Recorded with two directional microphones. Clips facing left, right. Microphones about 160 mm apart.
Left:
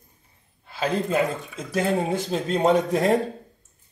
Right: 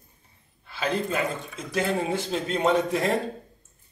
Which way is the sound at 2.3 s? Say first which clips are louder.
Left 3 dB; 40° left (ahead or behind).